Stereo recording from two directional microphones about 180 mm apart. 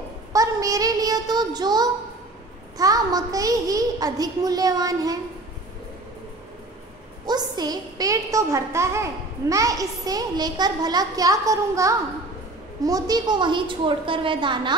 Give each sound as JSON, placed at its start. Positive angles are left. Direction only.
{"t": 0.3, "sound": "child singing", "side_deg": -20}
{"t": 2.8, "sound": "a woman's voice", "side_deg": -20}
{"t": 7.2, "sound": "a woman's voice", "side_deg": -20}